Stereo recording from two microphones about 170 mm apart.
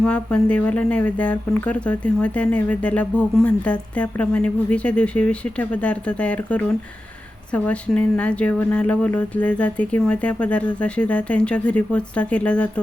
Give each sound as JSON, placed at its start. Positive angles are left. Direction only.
{"t": 0.0, "sound": "speech", "side_deg": 5}